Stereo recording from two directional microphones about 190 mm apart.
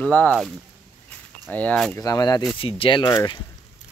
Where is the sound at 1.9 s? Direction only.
20° left (ahead or behind).